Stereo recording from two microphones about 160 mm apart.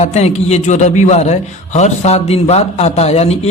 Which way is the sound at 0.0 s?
45° left (ahead or behind).